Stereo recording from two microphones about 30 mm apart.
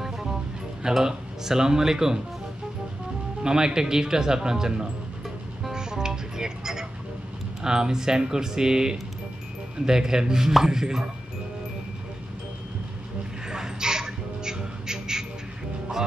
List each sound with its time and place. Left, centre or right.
0.0 s music: centre
1.0 s speech: centre
3.4 s speech: right
5.7 s music: right
7.6 s speech: right
13.5 s crow: right